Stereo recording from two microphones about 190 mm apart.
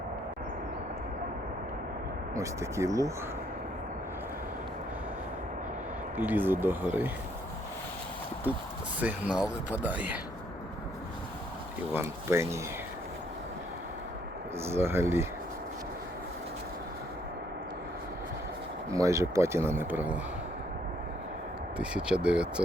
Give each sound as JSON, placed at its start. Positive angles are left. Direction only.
{"t": 2.3, "sound": "speech", "side_deg": -15}
{"t": 6.1, "sound": "speech", "side_deg": -10}
{"t": 9.0, "sound": "speech", "side_deg": -5}
{"t": 11.9, "sound": "speech", "side_deg": -15}
{"t": 14.6, "sound": "speech", "side_deg": -10}
{"t": 18.9, "sound": "speech", "side_deg": -15}
{"t": 21.8, "sound": "speech", "side_deg": -5}